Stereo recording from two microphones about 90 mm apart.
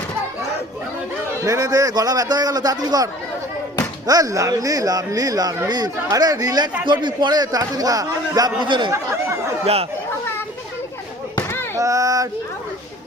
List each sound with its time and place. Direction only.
1.5 s a man's voice: 40° right (ahead or behind)
6.8 s a man's voice: 60° right (ahead or behind)
11.8 s a sound: 40° right (ahead or behind)